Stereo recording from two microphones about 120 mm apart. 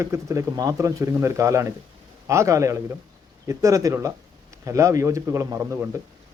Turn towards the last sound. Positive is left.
turn(degrees=-25)  # may be behind; listen again after turning